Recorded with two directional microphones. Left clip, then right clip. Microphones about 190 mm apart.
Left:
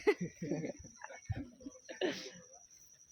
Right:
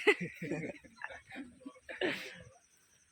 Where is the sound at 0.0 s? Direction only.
15° right (ahead or behind).